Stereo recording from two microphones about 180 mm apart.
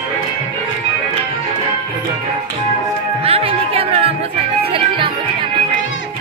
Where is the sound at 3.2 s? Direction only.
35° right (ahead or behind).